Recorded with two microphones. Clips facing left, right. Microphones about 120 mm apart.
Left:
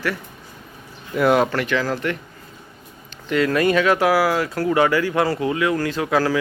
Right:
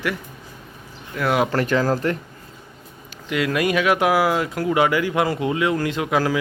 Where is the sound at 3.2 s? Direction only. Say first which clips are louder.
Left 3 dB; 10° right (ahead or behind).